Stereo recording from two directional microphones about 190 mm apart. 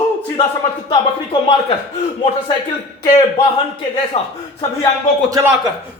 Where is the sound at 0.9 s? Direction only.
30° left (ahead or behind).